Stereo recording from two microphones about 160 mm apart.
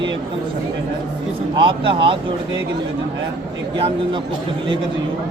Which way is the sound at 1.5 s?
30° right (ahead or behind).